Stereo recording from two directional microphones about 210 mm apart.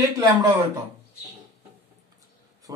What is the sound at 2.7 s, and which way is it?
Speech, 15° right (ahead or behind).